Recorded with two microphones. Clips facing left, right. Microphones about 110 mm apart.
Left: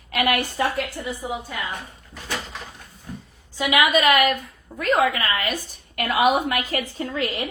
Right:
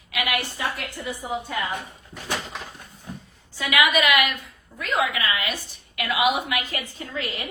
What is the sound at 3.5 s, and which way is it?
Speech, 20° left (ahead or behind).